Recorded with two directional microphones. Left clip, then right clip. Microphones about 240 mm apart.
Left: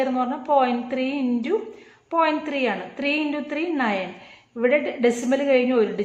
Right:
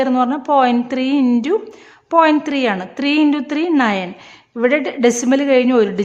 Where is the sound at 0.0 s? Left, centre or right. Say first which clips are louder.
Right 7 dB; right.